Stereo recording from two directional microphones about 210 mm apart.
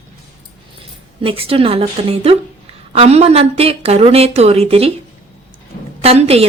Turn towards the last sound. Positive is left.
turn(degrees=-30)  # may be behind; listen again after turning